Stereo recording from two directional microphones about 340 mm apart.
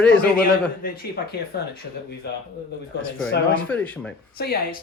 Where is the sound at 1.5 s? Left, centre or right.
Left.